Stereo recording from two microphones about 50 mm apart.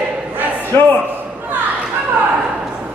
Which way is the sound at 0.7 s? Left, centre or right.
Left.